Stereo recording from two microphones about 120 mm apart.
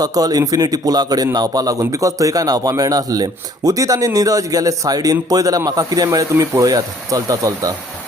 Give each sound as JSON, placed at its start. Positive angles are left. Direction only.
{"t": 0.0, "sound": "a man's voice", "side_deg": -30}